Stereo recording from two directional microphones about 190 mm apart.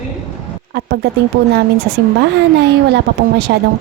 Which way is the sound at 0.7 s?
55° right (ahead or behind).